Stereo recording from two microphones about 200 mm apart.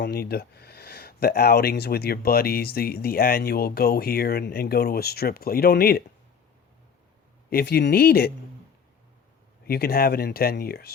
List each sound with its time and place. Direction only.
0.0 s speech: 50° left (ahead or behind)
7.5 s speech: 55° left (ahead or behind)
9.6 s speech: 50° left (ahead or behind)